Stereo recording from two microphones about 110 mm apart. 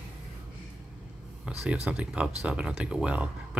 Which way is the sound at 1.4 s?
10° right (ahead or behind).